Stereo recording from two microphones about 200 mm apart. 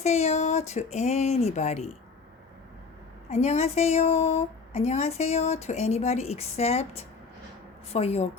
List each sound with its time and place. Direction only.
0.0 s a woman's voice: 35° left (ahead or behind)
3.2 s a woman's voice: 35° left (ahead or behind)
7.9 s a woman's voice: 30° left (ahead or behind)